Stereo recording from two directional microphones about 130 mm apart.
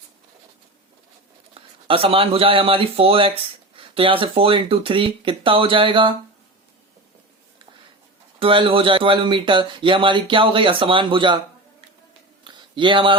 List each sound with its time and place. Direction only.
1.5 s speech: 45° right (ahead or behind)
8.4 s a man's voice: 40° right (ahead or behind)
12.5 s a sound: 40° right (ahead or behind)